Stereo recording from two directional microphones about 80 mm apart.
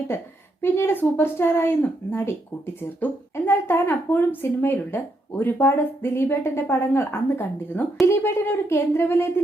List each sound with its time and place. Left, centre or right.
0.1 s speech: left